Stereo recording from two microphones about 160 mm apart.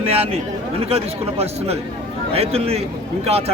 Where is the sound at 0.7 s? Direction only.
40° right (ahead or behind).